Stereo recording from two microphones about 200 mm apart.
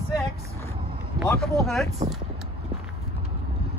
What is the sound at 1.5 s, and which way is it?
Speech, centre (ahead or behind).